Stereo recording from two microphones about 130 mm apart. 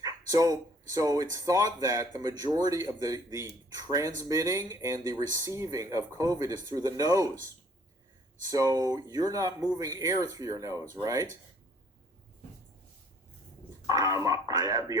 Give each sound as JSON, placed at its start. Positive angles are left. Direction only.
{"t": 0.0, "sound": "speech", "side_deg": -25}
{"t": 8.4, "sound": "speech", "side_deg": -30}
{"t": 13.8, "sound": "speech", "side_deg": -25}